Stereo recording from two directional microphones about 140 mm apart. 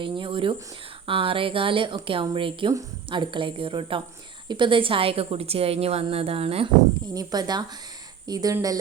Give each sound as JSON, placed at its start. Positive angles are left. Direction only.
{"t": 0.0, "sound": "a sound", "side_deg": -35}
{"t": 1.0, "sound": "a woman's voice", "side_deg": -40}
{"t": 7.1, "sound": "speech", "side_deg": -30}